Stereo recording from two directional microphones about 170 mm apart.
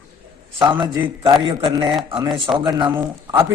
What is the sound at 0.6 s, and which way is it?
A man's voice, 25° right (ahead or behind).